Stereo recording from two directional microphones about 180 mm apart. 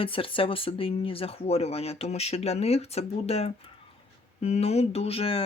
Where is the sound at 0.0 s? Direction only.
30° left (ahead or behind).